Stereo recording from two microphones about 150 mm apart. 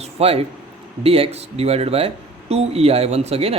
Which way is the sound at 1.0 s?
40° right (ahead or behind).